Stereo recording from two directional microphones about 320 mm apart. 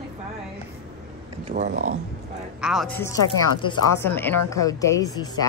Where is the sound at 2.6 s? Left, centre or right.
Centre.